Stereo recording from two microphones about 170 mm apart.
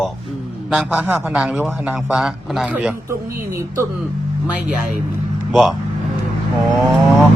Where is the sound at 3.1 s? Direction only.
15° right (ahead or behind).